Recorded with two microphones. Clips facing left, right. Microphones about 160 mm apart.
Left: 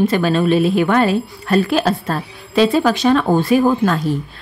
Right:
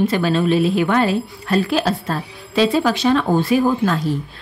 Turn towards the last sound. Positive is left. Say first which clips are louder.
# left 2 dB
turn(degrees=55)  # may be behind; listen again after turning